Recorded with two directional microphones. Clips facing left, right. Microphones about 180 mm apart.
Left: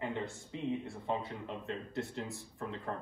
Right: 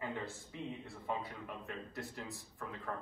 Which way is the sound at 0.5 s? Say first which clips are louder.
Left 10 dB; 20° left (ahead or behind).